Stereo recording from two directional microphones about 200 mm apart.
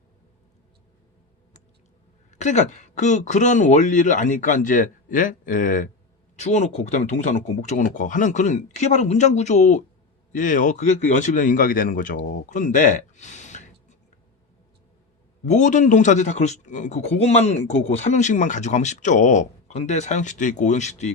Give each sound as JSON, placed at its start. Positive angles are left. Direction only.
{"t": 2.3, "sound": "a man's voice", "side_deg": 35}
{"t": 15.4, "sound": "a man's voice", "side_deg": 35}